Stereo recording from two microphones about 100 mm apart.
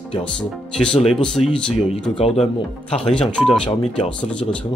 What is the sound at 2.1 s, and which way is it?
Speech, 90° left.